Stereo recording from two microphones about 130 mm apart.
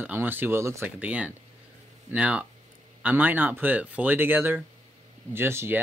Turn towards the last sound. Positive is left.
turn(degrees=-15)  # may be behind; listen again after turning